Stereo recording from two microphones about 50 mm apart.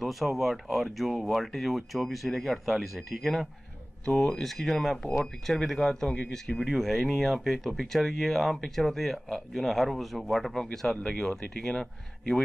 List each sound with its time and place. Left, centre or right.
0.0 s speech: centre
4.1 s speech: centre
4.4 s speech: centre
10.5 s speech: centre